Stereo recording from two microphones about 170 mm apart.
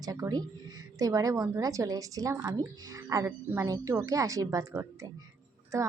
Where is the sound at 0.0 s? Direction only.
20° right (ahead or behind).